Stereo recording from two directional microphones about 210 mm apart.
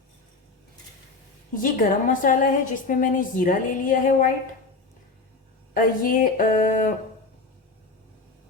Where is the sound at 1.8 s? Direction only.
40° left (ahead or behind).